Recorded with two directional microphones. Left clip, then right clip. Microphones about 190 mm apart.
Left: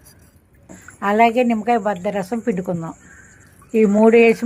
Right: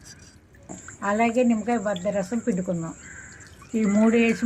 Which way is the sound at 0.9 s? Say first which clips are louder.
Left 7 dB; 35° left (ahead or behind).